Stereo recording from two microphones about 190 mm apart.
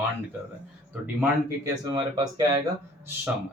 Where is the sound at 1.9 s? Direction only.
20° right (ahead or behind).